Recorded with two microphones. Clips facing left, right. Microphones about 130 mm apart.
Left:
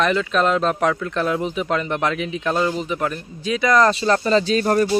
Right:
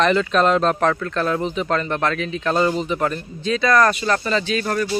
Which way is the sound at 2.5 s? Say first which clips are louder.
Right 4 dB; centre (ahead or behind).